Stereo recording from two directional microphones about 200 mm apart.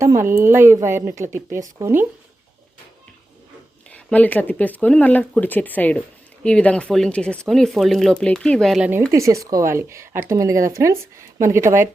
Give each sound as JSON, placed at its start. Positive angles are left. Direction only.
{"t": 0.0, "sound": "speech", "side_deg": -15}
{"t": 3.8, "sound": "speech", "side_deg": 5}
{"t": 9.1, "sound": "speech", "side_deg": -15}